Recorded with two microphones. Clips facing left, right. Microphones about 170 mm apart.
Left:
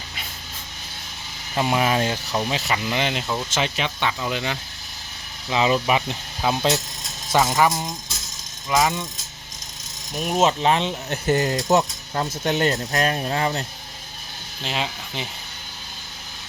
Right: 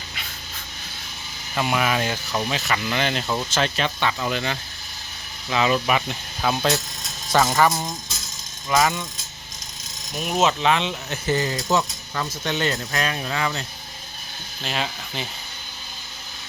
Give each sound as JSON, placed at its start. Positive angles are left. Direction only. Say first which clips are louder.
{"t": 1.5, "sound": "speech", "louder": "left 2 dB", "side_deg": 25}
{"t": 2.3, "sound": "speech", "louder": "left 1 dB", "side_deg": 15}
{"t": 8.7, "sound": "speech", "louder": "even", "side_deg": 20}
{"t": 10.2, "sound": "speech", "louder": "left 1 dB", "side_deg": 0}
{"t": 10.4, "sound": "speech", "louder": "left 1 dB", "side_deg": 35}
{"t": 11.8, "sound": "speech", "louder": "left 3 dB", "side_deg": 30}
{"t": 14.6, "sound": "speech", "louder": "even", "side_deg": 20}